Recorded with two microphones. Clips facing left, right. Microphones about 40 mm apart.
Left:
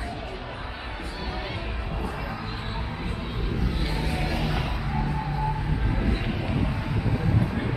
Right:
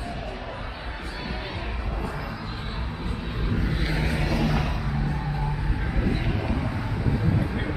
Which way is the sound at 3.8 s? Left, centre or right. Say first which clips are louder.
Right 2 dB; centre.